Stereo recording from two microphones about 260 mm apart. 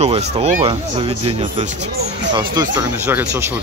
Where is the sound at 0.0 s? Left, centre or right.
Right.